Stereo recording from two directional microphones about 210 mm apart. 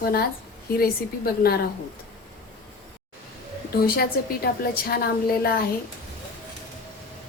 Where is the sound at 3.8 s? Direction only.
45° left (ahead or behind).